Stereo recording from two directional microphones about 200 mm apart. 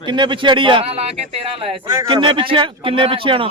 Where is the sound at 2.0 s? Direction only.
25° right (ahead or behind).